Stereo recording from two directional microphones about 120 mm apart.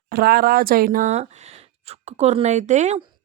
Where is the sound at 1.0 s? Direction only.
70° right (ahead or behind).